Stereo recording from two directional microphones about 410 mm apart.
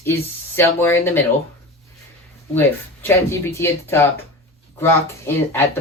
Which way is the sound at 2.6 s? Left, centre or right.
Centre.